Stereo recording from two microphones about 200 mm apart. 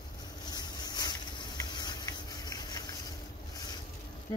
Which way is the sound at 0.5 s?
20° left (ahead or behind).